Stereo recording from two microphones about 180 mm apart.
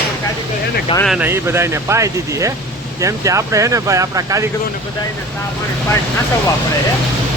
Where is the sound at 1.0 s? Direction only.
5° right (ahead or behind).